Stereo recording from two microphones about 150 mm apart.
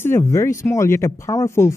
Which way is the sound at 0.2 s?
20° left (ahead or behind).